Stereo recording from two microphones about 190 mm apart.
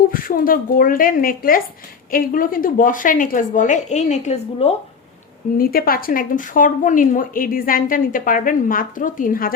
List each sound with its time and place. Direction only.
0.1 s a woman's voice: 50° left (ahead or behind)
5.5 s a woman's voice: 50° left (ahead or behind)